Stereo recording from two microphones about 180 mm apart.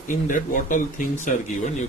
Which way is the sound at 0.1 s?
45° left (ahead or behind).